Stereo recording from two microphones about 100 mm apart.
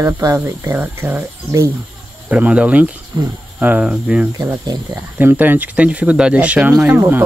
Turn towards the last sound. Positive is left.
turn(degrees=-20)  # may be behind; listen again after turning